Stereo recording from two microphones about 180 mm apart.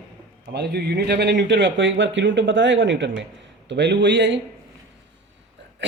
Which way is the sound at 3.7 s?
75° right (ahead or behind).